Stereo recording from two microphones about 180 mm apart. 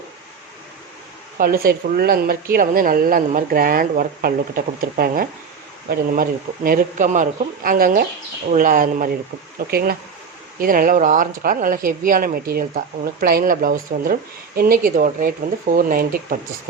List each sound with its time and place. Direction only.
1.4 s speech: 55° right (ahead or behind)
6.7 s speech: 50° right (ahead or behind)